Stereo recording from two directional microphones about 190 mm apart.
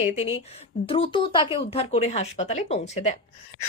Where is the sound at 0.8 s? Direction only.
30° left (ahead or behind).